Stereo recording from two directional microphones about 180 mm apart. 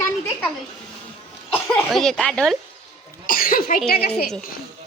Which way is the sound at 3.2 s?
50° left (ahead or behind).